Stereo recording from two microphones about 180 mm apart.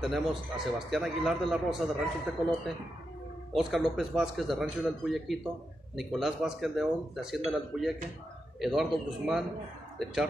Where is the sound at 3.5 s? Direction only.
Centre (ahead or behind).